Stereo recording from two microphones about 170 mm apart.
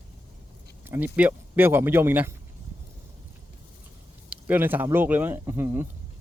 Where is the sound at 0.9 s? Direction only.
10° right (ahead or behind).